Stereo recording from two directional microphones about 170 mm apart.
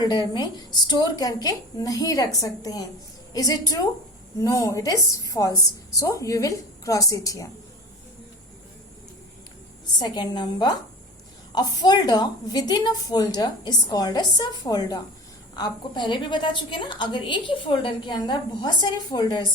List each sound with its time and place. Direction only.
0.0 s a woman's voice: 25° left (ahead or behind)
10.0 s a woman's voice: 25° left (ahead or behind)